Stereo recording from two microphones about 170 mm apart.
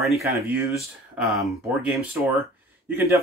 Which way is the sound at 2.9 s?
15° right (ahead or behind).